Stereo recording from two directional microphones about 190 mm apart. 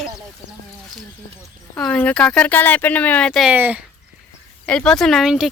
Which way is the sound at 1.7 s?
10° left (ahead or behind).